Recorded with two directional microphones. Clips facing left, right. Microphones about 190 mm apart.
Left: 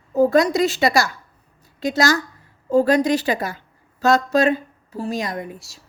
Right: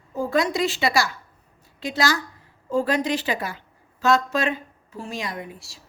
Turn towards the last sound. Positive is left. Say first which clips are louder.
# left 5 dB
turn(degrees=45)  # may be behind; listen again after turning